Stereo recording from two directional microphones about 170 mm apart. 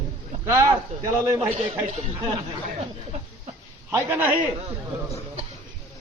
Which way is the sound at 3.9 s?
10° right (ahead or behind).